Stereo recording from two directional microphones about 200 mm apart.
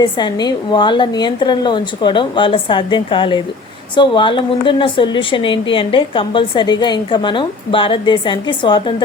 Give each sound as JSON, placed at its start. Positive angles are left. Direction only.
{"t": 0.0, "sound": "a woman's voice", "side_deg": 20}